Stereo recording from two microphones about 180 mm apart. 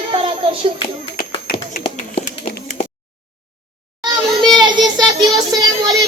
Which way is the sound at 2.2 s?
40° left (ahead or behind).